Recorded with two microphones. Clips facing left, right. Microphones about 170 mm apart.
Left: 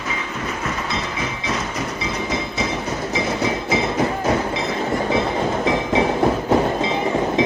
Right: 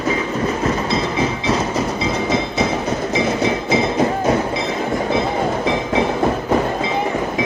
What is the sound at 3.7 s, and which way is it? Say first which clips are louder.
Music: right 4 dB; 20° right (ahead or behind).